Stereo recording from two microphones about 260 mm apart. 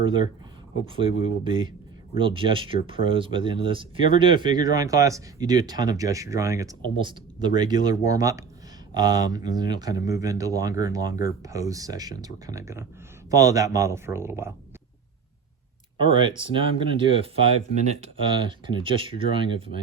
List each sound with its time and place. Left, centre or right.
0.0 s speech: centre
16.0 s speech: centre